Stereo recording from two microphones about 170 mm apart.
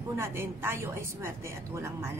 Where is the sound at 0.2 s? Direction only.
15° right (ahead or behind).